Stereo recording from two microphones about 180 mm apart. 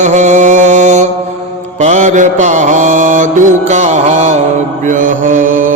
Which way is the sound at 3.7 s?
40° right (ahead or behind).